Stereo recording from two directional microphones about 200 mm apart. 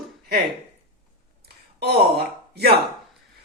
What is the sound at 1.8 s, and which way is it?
Speech, 50° right (ahead or behind).